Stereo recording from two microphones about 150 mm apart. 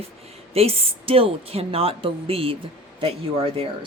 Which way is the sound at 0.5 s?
40° right (ahead or behind).